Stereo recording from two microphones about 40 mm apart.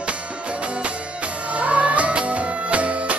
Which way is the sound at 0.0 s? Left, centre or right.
Right.